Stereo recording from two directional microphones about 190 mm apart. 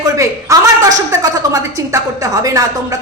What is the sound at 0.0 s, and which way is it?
A woman's voice, 15° right (ahead or behind).